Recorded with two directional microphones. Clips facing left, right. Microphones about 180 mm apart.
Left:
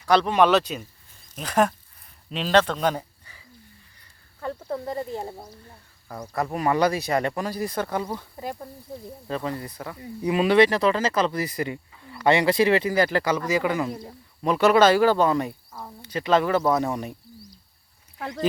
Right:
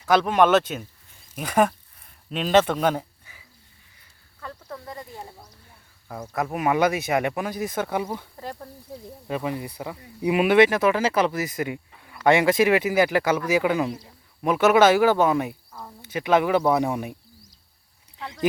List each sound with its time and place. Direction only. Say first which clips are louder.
0.0 s speech: even; 5° right (ahead or behind)
1.3 s a sound: right 1 dB; 10° right (ahead or behind)
4.4 s a sound: left 8 dB; 30° left (ahead or behind)
6.1 s speech: even; 5° right (ahead or behind)
8.4 s speech: left 2 dB; 10° left (ahead or behind)
9.2 s speech: right 2 dB; 10° right (ahead or behind)